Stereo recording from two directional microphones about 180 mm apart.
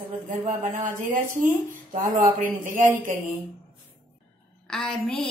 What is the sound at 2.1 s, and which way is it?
Speech, 45° right (ahead or behind).